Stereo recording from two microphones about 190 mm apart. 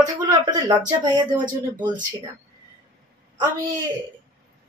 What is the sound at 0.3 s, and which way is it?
Speech, 20° right (ahead or behind).